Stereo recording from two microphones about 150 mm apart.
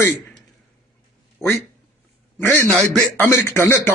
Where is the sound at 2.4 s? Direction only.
15° left (ahead or behind).